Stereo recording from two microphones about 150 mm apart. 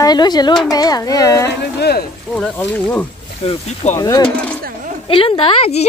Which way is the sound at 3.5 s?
45° left (ahead or behind).